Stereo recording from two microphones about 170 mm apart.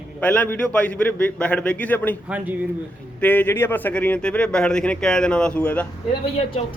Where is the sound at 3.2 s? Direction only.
10° left (ahead or behind).